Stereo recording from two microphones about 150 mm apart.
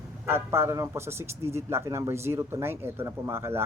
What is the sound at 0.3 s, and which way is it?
Speech, 15° right (ahead or behind).